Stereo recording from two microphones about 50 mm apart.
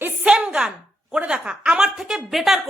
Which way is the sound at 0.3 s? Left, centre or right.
Centre.